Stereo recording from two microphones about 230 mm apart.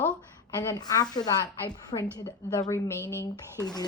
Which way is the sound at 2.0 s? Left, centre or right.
Centre.